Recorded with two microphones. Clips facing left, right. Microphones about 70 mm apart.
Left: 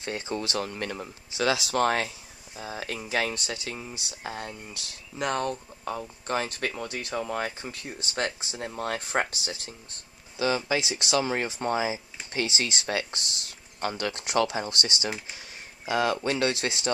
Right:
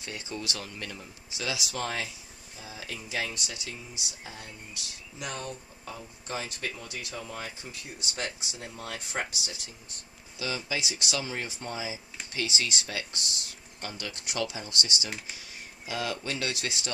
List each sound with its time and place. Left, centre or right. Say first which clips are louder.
0.0 s speech: left 6 dB; left
4.2 s speech: left 8 dB; left
10.8 s speech: left 5 dB; left
11.1 s speech: left 11 dB; left
12.4 s speech: left 3 dB; left